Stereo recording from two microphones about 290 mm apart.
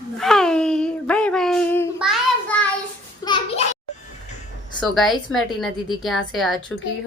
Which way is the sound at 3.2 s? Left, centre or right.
Centre.